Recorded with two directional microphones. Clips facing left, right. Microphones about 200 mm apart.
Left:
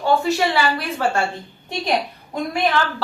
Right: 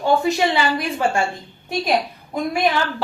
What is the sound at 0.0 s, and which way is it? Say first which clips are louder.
A woman's voice: right 1 dB; 20° right (ahead or behind).